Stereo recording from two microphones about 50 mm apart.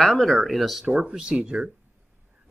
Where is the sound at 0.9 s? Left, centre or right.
Right.